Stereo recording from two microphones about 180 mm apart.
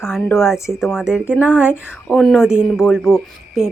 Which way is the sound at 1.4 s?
10° left (ahead or behind).